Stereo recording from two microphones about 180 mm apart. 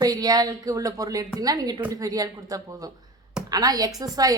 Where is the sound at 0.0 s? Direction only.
20° right (ahead or behind).